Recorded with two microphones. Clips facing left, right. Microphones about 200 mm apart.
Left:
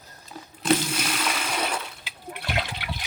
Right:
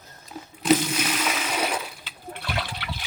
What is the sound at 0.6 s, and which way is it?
Water, 5° right (ahead or behind).